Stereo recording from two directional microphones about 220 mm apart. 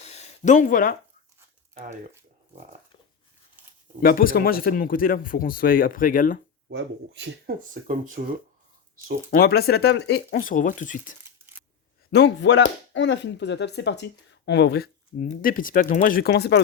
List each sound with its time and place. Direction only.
0.0 s a sound: 30° left (ahead or behind)
1.7 s speech: 35° right (ahead or behind)
4.0 s speech: 40° left (ahead or behind)
6.7 s speech: 55° right (ahead or behind)
9.3 s speech: 45° left (ahead or behind)
12.1 s speech: 50° left (ahead or behind)